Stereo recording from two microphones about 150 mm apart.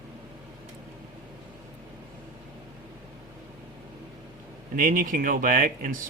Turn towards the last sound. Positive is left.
turn(degrees=-65)  # may be behind; listen again after turning